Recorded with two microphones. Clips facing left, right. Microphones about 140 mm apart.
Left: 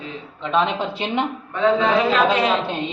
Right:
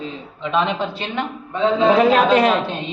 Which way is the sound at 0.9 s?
20° left (ahead or behind).